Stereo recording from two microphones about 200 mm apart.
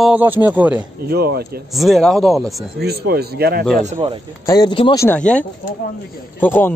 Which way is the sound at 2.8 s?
55° right (ahead or behind).